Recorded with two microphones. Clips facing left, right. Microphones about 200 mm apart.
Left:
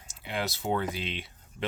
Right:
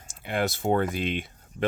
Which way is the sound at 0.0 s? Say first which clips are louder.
Right 6 dB; 50° right (ahead or behind).